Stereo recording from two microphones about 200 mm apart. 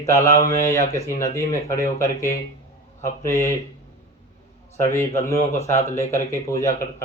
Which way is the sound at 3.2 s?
15° left (ahead or behind).